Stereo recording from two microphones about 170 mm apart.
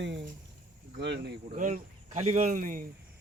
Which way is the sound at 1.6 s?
50° right (ahead or behind).